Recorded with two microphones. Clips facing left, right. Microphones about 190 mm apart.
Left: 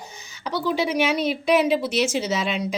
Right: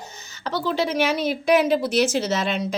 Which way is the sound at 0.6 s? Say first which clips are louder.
Even; 5° left (ahead or behind).